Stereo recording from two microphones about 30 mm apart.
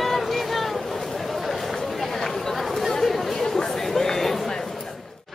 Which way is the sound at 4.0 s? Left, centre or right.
Centre.